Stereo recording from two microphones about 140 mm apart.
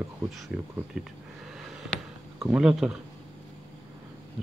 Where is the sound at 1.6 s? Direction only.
Centre (ahead or behind).